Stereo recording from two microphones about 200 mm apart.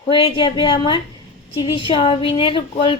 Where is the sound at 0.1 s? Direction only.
25° left (ahead or behind).